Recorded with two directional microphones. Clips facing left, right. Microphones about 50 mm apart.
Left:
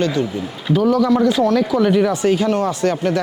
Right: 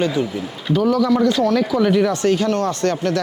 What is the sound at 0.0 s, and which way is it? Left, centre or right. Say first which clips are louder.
Speech: left 1 dB; centre.